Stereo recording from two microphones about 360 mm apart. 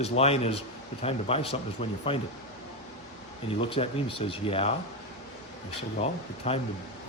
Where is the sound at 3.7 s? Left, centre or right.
Centre.